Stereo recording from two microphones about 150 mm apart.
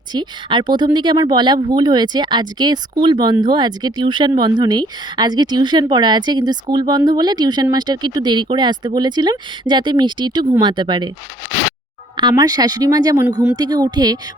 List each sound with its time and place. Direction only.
0.1 s a woman's voice: 30° right (ahead or behind)
12.1 s a woman's voice: 25° right (ahead or behind)